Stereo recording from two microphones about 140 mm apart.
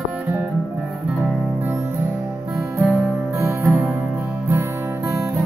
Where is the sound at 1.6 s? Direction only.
15° right (ahead or behind).